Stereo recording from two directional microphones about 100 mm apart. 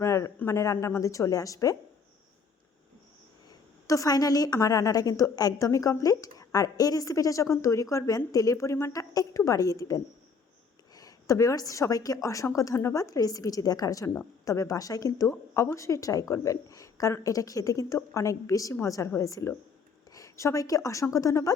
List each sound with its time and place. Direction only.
0.0 s a sound: 30° left (ahead or behind)
0.3 s a woman's voice: 30° left (ahead or behind)
3.8 s a woman's voice: 35° left (ahead or behind)